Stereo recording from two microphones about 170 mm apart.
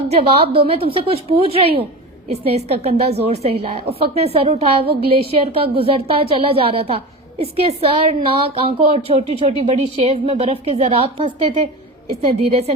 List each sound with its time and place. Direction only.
0.1 s a woman's voice: 35° right (ahead or behind)